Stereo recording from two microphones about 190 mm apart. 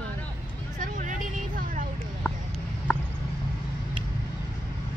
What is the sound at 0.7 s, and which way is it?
Vehicle, 45° right (ahead or behind).